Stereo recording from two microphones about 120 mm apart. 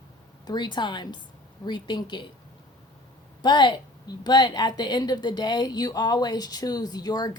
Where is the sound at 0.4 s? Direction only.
40° left (ahead or behind).